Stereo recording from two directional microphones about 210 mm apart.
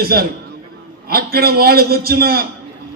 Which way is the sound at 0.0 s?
45° right (ahead or behind).